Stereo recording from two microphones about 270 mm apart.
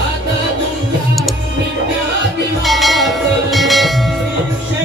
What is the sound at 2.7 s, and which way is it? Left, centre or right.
Music, centre.